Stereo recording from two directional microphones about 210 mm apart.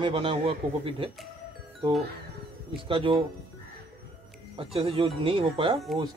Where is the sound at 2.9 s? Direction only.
25° right (ahead or behind).